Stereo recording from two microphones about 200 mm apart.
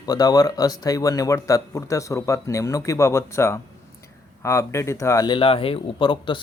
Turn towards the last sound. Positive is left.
turn(degrees=25)  # may be behind; listen again after turning